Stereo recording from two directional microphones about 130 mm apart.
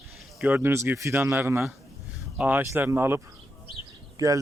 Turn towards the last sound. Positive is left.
turn(degrees=-25)  # may be behind; listen again after turning